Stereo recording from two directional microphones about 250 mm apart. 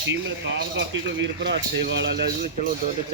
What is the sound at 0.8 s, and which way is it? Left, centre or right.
Speech, right.